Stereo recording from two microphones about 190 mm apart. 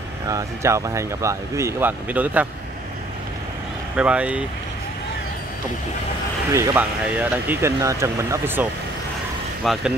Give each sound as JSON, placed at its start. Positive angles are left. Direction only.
{"t": 0.3, "sound": "speech", "side_deg": -15}
{"t": 3.9, "sound": "speech", "side_deg": -5}
{"t": 6.5, "sound": "speech", "side_deg": -15}
{"t": 9.6, "sound": "speech", "side_deg": 0}